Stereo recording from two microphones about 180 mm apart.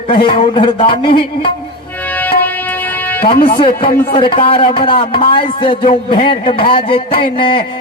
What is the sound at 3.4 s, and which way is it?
A man's voice, 30° left (ahead or behind).